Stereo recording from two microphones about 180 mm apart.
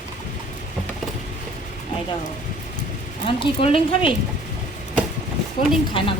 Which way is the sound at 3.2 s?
30° left (ahead or behind).